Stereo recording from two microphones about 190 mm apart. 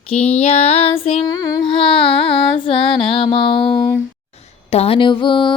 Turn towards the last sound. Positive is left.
turn(degrees=25)  # may be behind; listen again after turning